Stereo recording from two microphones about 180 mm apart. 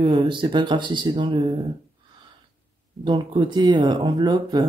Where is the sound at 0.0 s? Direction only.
30° right (ahead or behind).